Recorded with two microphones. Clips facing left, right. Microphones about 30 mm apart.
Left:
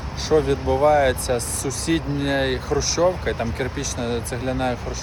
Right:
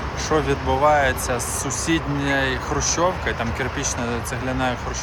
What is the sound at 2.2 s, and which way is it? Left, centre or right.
Speech, left.